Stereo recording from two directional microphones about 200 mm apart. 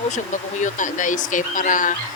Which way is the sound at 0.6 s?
40° left (ahead or behind).